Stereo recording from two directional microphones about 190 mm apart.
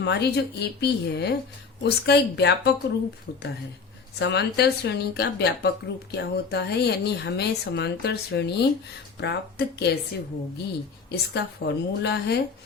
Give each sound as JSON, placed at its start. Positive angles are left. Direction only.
{"t": 0.0, "sound": "a woman's voice", "side_deg": 60}
{"t": 3.3, "sound": "a woman's voice", "side_deg": 55}
{"t": 11.1, "sound": "a woman's voice", "side_deg": 60}